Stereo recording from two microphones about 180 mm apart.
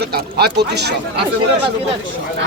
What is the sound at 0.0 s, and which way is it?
Speech, 65° right (ahead or behind).